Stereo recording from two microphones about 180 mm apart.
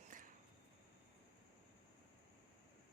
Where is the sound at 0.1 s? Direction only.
45° right (ahead or behind).